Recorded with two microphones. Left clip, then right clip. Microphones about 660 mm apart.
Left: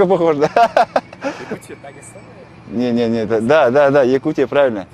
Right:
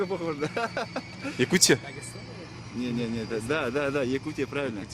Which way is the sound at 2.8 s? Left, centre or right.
Left.